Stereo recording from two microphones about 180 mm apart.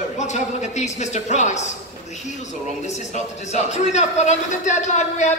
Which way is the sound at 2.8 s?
40° left (ahead or behind).